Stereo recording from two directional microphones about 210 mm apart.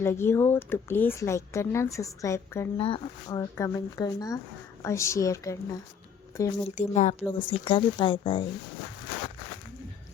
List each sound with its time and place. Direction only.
0.0 s speech: 10° left (ahead or behind)
2.7 s speech: 25° left (ahead or behind)
6.7 s speech: 35° left (ahead or behind)